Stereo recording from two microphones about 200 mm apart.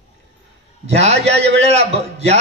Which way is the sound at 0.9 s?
30° right (ahead or behind).